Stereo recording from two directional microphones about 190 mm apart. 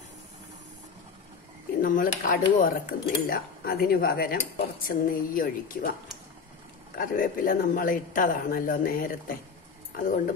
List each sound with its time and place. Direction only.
1.8 s speech: 45° left (ahead or behind)
7.0 s speech: 45° left (ahead or behind)